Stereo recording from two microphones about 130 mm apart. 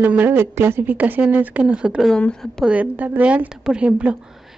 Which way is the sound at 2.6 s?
10° right (ahead or behind).